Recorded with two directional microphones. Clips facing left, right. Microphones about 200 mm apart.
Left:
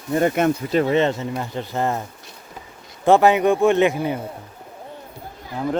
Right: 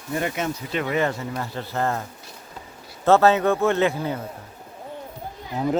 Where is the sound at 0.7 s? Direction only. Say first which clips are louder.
Left 2 dB; 30° left (ahead or behind); by 4.2 s 15° left (ahead or behind).